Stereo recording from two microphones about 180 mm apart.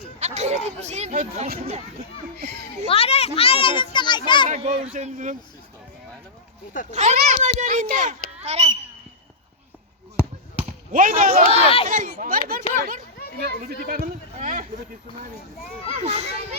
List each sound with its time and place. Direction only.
0.2 s chatter: 40° right (ahead or behind)
1.5 s speech: 35° right (ahead or behind)
2.8 s a child's voice: 35° left (ahead or behind)
4.4 s speech: 40° right (ahead or behind)
6.9 s speech: 40° right (ahead or behind)
10.9 s speech: 50° right (ahead or behind)
11.5 s speech: 30° left (ahead or behind)
11.9 s speech: 50° right (ahead or behind)
13.1 s children playing: 60° left (ahead or behind)
13.4 s speech: 60° right (ahead or behind); by 14.7 s 40° right (ahead or behind)
15.9 s speech: 35° right (ahead or behind)